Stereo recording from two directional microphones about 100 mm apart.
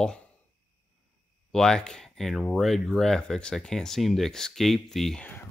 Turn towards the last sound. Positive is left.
turn(degrees=5)  # may be behind; listen again after turning